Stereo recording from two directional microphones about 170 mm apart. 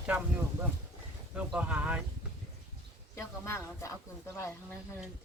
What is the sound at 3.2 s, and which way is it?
Speech, 15° left (ahead or behind).